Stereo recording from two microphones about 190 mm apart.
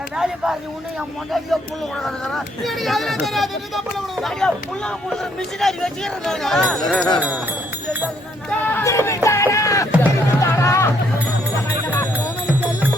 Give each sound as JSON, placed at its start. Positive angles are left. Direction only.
{"t": 2.0, "sound": "speech", "side_deg": 0}
{"t": 8.4, "sound": "speech", "side_deg": 15}
{"t": 11.9, "sound": "music", "side_deg": 15}
{"t": 12.5, "sound": "music", "side_deg": -10}